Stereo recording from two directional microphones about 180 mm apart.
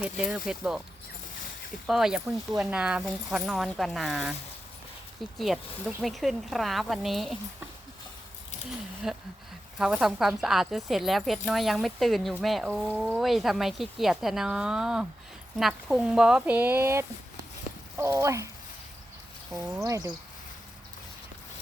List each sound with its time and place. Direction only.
0.0 s a woman's voice: 5° right (ahead or behind)
1.9 s a woman's voice: centre (ahead or behind)
5.4 s a woman's voice: centre (ahead or behind)
9.0 s a woman's voice: 5° right (ahead or behind)
19.5 s speech: 15° right (ahead or behind)